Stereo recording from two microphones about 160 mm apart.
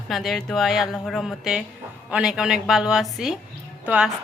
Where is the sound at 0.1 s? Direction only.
Centre (ahead or behind).